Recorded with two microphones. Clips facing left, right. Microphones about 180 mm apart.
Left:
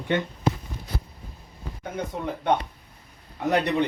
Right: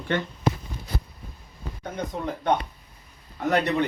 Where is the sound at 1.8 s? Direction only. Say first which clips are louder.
Even; 5° left (ahead or behind).